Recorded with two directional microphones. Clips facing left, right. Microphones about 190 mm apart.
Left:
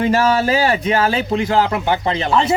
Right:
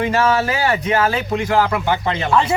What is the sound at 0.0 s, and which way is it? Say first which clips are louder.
Speech: left 2 dB; 30° left (ahead or behind).